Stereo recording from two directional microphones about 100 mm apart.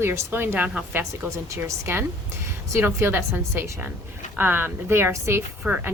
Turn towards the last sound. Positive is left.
turn(degrees=-15)  # may be behind; listen again after turning